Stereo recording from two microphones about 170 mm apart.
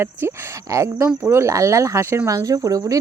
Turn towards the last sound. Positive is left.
turn(degrees=-20)  # may be behind; listen again after turning